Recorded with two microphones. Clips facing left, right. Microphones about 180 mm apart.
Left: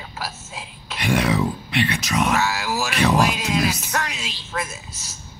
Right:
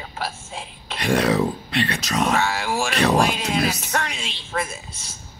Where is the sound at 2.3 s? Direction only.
30° right (ahead or behind).